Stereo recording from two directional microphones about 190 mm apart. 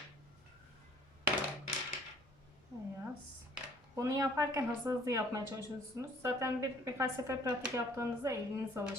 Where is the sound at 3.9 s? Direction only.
15° right (ahead or behind).